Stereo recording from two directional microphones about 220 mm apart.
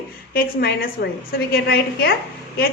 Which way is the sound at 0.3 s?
45° left (ahead or behind).